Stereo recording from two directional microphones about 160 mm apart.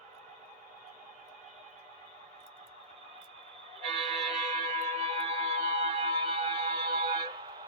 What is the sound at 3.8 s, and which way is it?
Music, 40° right (ahead or behind).